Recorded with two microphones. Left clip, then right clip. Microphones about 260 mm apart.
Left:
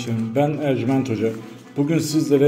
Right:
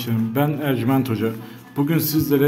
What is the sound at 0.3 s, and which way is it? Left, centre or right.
A man's voice, centre.